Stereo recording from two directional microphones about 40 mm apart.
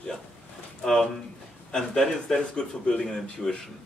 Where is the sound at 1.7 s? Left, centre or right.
Centre.